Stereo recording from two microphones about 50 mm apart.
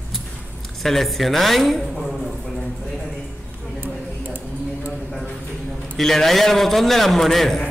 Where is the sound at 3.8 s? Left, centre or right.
Right.